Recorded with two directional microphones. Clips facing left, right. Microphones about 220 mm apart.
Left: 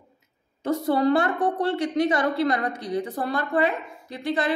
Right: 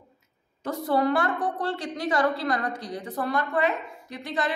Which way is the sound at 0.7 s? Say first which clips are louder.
Left 3 dB; 25° left (ahead or behind).